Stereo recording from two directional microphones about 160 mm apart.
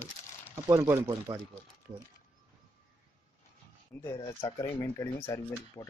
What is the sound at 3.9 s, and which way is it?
Speech, 15° left (ahead or behind).